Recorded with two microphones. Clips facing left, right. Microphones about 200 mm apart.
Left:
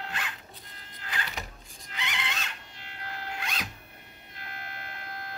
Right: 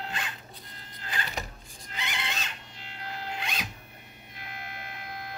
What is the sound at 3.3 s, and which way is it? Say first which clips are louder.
Zipper: right 1 dB; 20° right (ahead or behind).